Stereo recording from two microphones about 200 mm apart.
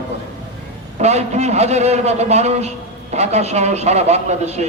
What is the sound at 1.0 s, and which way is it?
A man's voice, 35° right (ahead or behind).